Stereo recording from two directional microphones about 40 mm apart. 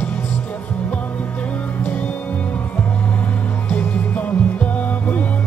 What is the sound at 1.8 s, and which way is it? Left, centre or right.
Music, left.